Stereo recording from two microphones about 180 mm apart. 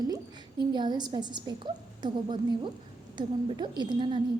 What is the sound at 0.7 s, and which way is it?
A woman's voice, 25° right (ahead or behind).